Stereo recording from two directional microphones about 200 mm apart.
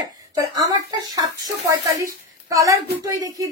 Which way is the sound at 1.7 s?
15° right (ahead or behind).